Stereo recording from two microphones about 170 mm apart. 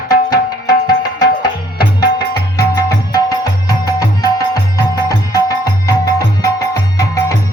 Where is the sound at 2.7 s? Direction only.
20° left (ahead or behind).